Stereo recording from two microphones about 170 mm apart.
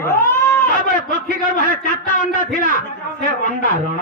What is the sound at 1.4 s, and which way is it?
A man's voice, 50° left (ahead or behind).